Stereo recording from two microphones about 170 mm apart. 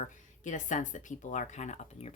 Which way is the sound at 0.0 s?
45° left (ahead or behind).